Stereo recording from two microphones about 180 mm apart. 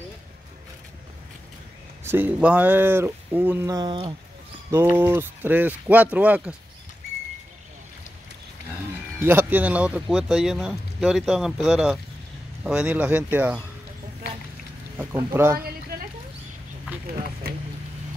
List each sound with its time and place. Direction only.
2.0 s speech: 10° right (ahead or behind)
3.7 s speech: 25° right (ahead or behind)
4.6 s speech: 15° right (ahead or behind)
9.2 s speech: 10° right (ahead or behind)
15.3 s speech: 15° right (ahead or behind)
15.6 s a sound: 55° right (ahead or behind)